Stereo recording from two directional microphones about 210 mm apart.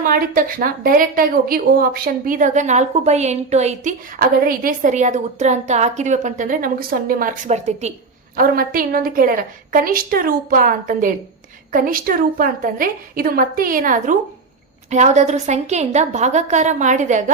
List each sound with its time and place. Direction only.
0.0 s a woman's voice: 40° right (ahead or behind)
8.4 s a woman's voice: 45° right (ahead or behind)